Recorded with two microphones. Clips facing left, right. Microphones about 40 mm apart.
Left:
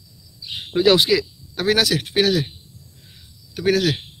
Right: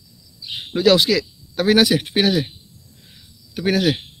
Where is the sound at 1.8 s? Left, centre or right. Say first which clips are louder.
Right 3 dB; centre.